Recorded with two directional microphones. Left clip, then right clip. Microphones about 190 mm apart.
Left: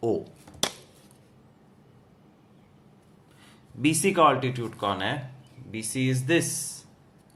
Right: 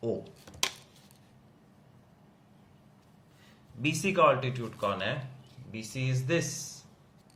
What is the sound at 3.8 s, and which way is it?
Speech, 50° left (ahead or behind).